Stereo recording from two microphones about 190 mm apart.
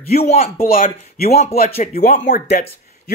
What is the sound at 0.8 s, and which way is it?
Speech, 35° left (ahead or behind).